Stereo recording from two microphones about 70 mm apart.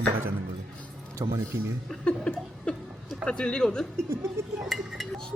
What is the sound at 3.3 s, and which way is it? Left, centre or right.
Speech, centre.